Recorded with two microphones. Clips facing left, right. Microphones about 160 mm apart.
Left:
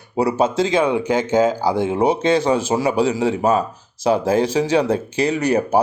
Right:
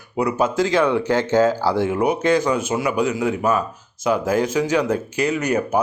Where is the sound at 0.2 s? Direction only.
30° left (ahead or behind).